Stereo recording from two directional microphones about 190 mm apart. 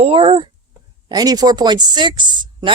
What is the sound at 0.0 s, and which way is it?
A woman's voice, 30° right (ahead or behind).